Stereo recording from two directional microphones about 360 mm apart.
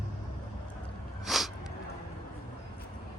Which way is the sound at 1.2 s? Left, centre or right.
Centre.